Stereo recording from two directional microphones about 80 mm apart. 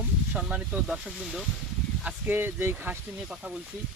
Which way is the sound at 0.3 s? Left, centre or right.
Centre.